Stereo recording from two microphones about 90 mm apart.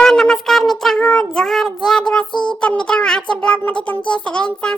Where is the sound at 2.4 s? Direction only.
10° left (ahead or behind).